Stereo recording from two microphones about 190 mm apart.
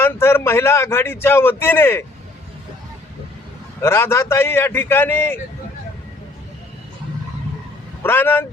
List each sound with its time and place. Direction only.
0.0 s a man's voice: 15° left (ahead or behind)
3.8 s a man's voice: 15° left (ahead or behind)
8.0 s a man's voice: 10° left (ahead or behind)